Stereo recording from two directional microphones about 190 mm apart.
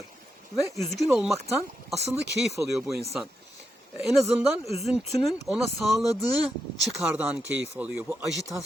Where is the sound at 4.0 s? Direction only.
Centre (ahead or behind).